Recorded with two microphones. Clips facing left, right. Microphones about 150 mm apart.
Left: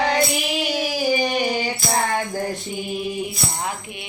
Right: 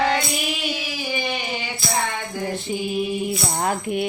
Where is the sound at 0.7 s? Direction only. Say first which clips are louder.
Left 7 dB; 40° left (ahead or behind).